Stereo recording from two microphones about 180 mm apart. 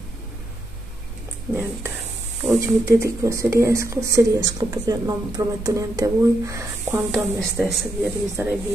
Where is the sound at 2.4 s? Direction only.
15° right (ahead or behind).